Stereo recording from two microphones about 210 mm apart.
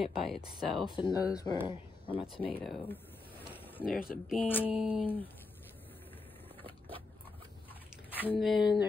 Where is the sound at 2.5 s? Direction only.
10° left (ahead or behind).